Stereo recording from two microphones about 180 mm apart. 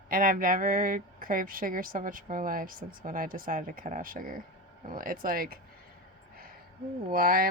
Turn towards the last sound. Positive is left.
turn(degrees=-55)  # may be behind; listen again after turning